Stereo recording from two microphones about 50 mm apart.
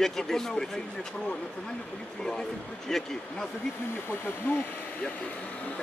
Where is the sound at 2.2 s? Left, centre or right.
Centre.